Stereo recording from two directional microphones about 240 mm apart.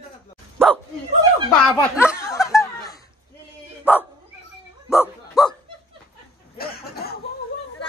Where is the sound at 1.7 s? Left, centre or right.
Centre.